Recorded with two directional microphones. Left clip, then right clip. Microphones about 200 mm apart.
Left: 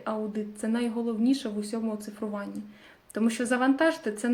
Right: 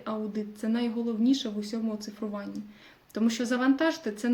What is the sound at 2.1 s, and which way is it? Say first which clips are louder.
Speech: left 2 dB; 15° right (ahead or behind).